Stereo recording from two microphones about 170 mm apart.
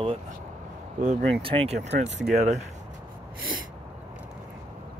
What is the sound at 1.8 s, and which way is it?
Speech, 45° right (ahead or behind).